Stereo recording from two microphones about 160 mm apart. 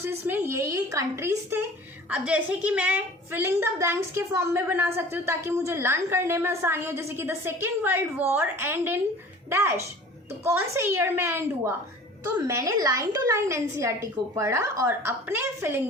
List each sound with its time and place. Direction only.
0.0 s a woman's voice: 15° right (ahead or behind)